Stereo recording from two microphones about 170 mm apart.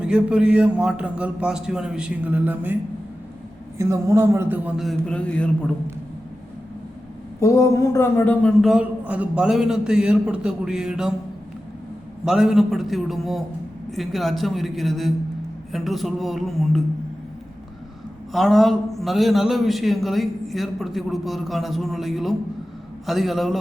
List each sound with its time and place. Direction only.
0.0 s a man's voice: 5° right (ahead or behind)
3.8 s a man's voice: 15° right (ahead or behind); by 5.7 s 5° left (ahead or behind)
7.3 s speech: 20° left (ahead or behind)
8.6 s a man's voice: 5° right (ahead or behind)
12.2 s a man's voice: centre (ahead or behind)
18.3 s a man's voice: centre (ahead or behind)